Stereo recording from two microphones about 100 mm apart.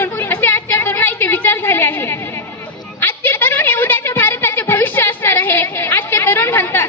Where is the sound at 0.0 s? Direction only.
20° left (ahead or behind).